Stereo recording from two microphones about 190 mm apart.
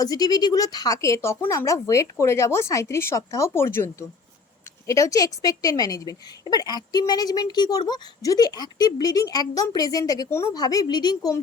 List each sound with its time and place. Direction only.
0.0 s speech: 20° left (ahead or behind)
4.9 s a woman's voice: 15° left (ahead or behind)